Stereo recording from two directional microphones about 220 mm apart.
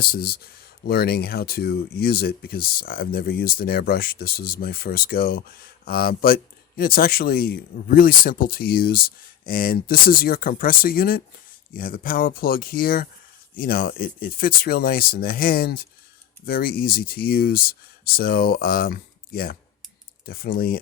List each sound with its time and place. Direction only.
0.0 s speech: 45° left (ahead or behind)